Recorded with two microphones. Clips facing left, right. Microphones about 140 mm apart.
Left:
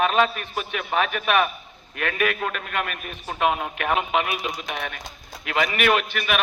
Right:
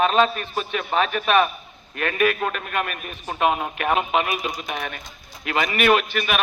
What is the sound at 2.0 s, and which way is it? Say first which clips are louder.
Speech: right 3 dB; 15° right (ahead or behind).